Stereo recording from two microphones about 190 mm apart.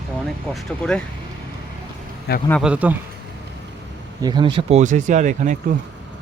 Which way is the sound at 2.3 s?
55° left (ahead or behind).